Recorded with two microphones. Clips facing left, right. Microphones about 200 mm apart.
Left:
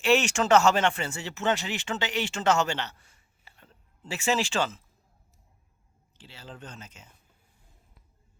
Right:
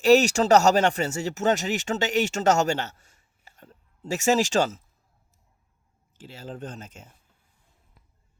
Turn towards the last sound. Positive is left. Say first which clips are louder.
# right 7 dB
turn(degrees=-45)  # may be behind; listen again after turning